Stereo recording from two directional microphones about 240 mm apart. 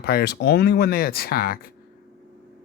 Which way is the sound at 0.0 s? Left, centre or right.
Left.